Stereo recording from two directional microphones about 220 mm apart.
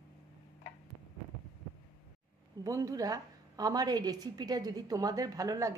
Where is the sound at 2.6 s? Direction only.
15° right (ahead or behind).